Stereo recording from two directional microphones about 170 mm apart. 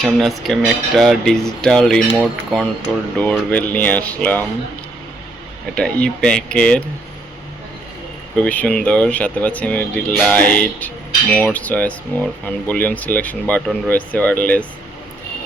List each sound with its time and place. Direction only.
0.0 s speech: centre (ahead or behind)
5.7 s speech: 5° left (ahead or behind)
8.4 s speech: 5° left (ahead or behind)